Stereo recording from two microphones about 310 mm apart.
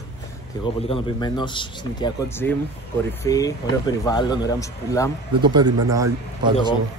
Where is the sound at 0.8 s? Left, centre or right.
Centre.